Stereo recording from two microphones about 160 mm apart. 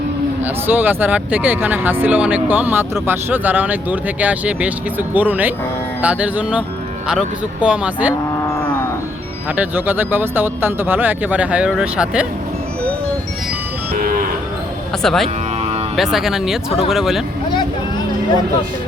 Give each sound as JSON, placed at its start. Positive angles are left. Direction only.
{"t": 0.4, "sound": "speech", "side_deg": -10}
{"t": 9.6, "sound": "speech", "side_deg": -10}
{"t": 13.9, "sound": "cattle", "side_deg": -60}
{"t": 15.0, "sound": "speech", "side_deg": 0}
{"t": 16.6, "sound": "speech", "side_deg": 35}
{"t": 16.9, "sound": "speech", "side_deg": 0}